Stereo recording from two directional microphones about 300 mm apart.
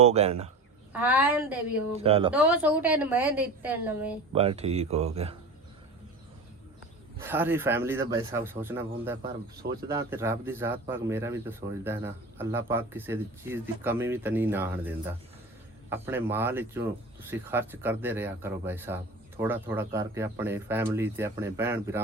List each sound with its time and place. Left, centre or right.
0.0 s speech: right
0.9 s a woman's voice: centre
1.9 s speech: centre
2.3 s a woman's voice: centre
4.3 s speech: centre
7.2 s speech: centre